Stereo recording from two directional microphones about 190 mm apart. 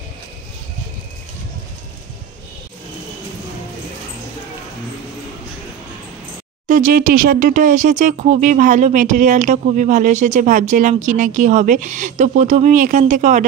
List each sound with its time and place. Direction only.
6.7 s speech: 45° right (ahead or behind)